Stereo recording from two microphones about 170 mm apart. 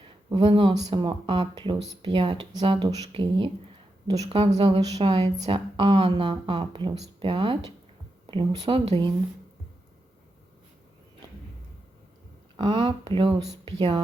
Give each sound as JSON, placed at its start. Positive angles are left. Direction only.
{"t": 0.3, "sound": "speech", "side_deg": -30}
{"t": 4.6, "sound": "speech", "side_deg": -25}
{"t": 4.9, "sound": "speech", "side_deg": -35}
{"t": 12.5, "sound": "speech", "side_deg": -30}
{"t": 13.7, "sound": "speech", "side_deg": -25}